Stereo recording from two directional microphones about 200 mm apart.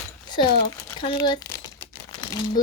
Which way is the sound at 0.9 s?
20° left (ahead or behind).